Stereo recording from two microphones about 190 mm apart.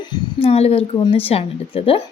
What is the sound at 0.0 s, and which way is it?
Speech, 25° left (ahead or behind).